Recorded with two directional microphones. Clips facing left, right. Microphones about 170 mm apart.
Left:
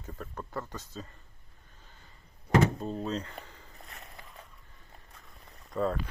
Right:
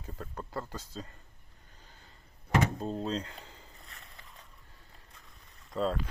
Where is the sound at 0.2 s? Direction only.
25° right (ahead or behind).